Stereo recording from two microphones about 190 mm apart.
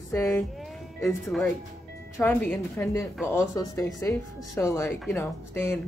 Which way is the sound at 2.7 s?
15° left (ahead or behind).